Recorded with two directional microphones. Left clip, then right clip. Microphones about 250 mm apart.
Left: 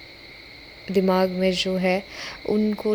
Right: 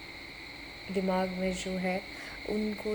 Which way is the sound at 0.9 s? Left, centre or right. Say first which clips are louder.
Left 10 dB; left.